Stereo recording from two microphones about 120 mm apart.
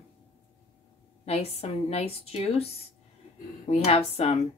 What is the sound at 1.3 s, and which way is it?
Speech, 55° left (ahead or behind).